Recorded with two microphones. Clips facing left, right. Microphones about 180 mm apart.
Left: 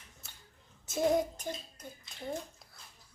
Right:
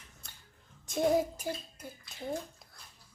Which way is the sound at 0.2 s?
5° left (ahead or behind).